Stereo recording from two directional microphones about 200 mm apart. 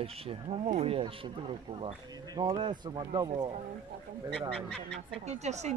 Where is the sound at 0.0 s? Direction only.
30° right (ahead or behind).